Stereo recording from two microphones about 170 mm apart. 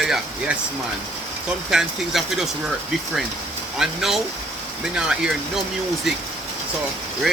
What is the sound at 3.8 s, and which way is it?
Speech, centre (ahead or behind).